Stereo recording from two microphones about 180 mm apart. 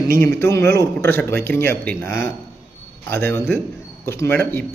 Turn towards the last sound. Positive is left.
turn(degrees=10)  # may be behind; listen again after turning